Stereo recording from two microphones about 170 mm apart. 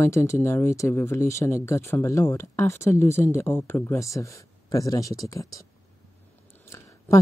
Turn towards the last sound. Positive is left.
turn(degrees=15)  # may be behind; listen again after turning